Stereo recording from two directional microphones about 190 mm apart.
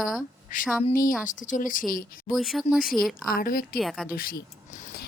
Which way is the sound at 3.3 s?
50° left (ahead or behind).